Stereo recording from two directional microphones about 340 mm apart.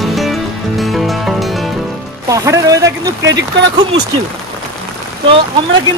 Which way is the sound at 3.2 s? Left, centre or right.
Right.